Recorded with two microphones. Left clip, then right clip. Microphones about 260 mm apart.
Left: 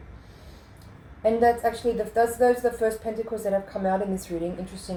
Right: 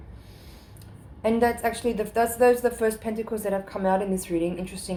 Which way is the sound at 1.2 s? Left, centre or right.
Right.